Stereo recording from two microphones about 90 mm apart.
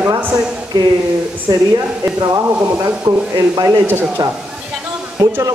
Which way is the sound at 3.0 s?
45° right (ahead or behind).